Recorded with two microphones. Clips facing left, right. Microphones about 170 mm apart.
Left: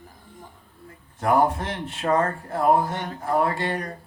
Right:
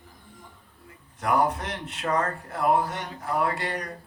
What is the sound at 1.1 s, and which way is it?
Speech, 30° left (ahead or behind).